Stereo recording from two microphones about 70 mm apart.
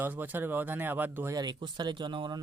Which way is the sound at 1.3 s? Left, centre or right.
Right.